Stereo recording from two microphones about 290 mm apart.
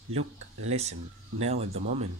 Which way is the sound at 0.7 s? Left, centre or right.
Right.